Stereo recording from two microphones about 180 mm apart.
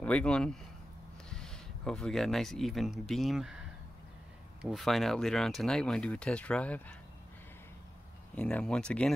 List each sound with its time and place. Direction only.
0.0 s speech: 5° left (ahead or behind)
4.6 s speech: centre (ahead or behind)
8.4 s speech: 5° left (ahead or behind)